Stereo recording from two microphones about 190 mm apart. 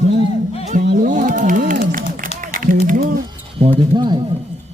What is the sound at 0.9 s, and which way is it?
Speech, 45° right (ahead or behind).